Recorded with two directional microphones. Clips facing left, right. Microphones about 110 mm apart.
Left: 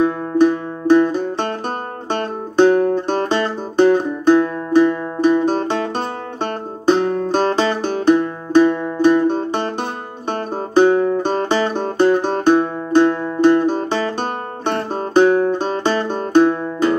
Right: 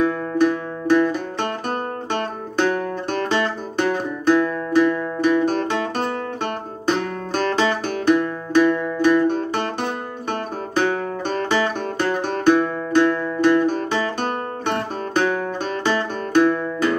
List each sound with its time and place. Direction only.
0.0 s music: 25° left (ahead or behind)